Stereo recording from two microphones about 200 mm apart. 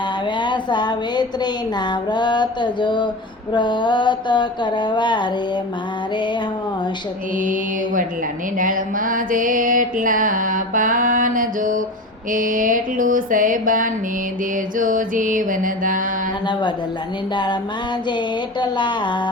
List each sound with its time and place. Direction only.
0.3 s a woman's voice: 25° left (ahead or behind)
1.9 s mantra: 20° left (ahead or behind)
8.5 s mantra: 40° right (ahead or behind)
17.3 s mantra: 20° left (ahead or behind)
18.6 s mantra: 25° left (ahead or behind)